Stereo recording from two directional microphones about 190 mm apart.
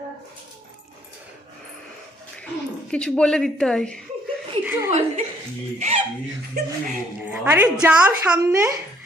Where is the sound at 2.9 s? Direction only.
5° left (ahead or behind).